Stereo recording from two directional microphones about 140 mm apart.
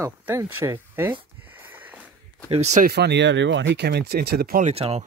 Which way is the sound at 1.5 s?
15° right (ahead or behind).